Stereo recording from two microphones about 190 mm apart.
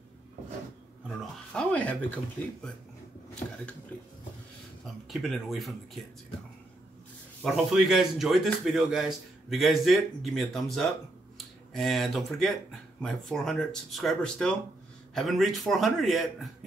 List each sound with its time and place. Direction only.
1.0 s a man's voice: 5° left (ahead or behind)
5.0 s a man's voice: centre (ahead or behind)
7.4 s a man's voice: centre (ahead or behind)